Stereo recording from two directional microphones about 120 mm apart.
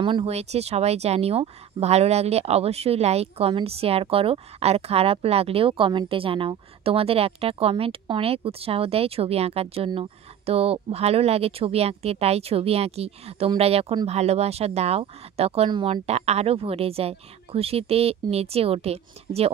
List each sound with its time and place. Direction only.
0.0 s speech: 45° right (ahead or behind)
0.3 s a woman's voice: 60° right (ahead or behind)